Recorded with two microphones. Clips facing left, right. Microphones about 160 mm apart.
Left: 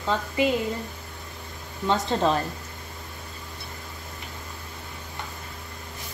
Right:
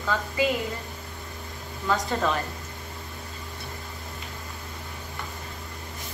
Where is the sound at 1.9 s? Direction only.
25° left (ahead or behind).